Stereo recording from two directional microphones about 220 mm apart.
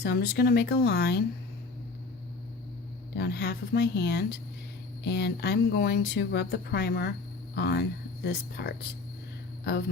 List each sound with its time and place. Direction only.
0.0 s speech: 45° left (ahead or behind)
3.2 s speech: 50° left (ahead or behind)